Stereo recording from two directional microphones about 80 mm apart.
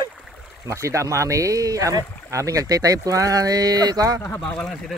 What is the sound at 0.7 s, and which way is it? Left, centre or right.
Speech, right.